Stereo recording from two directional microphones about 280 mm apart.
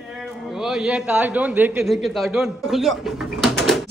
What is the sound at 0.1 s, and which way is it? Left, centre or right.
A man's voice, centre.